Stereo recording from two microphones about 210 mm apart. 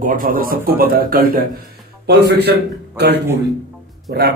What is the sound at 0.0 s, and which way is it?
A man's voice, 40° right (ahead or behind).